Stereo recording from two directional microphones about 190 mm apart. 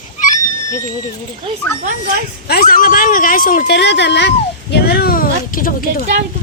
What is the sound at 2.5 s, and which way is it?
A woman's voice, 50° left (ahead or behind).